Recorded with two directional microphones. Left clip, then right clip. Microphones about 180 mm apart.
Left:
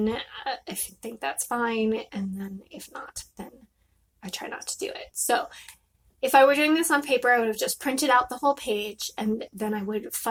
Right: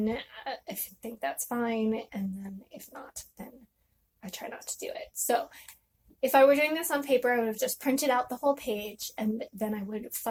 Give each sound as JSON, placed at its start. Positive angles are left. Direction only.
{"t": 0.0, "sound": "speech", "side_deg": 30}